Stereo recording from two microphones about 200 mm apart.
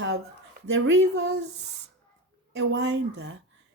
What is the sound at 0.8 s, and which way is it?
Speech, 55° right (ahead or behind).